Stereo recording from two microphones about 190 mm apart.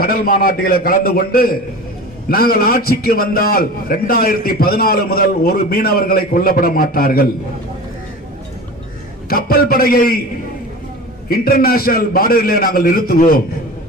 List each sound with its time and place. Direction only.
0.0 s a man's voice: 50° left (ahead or behind)
9.3 s a man's voice: 50° left (ahead or behind)
11.3 s a man's voice: 50° left (ahead or behind)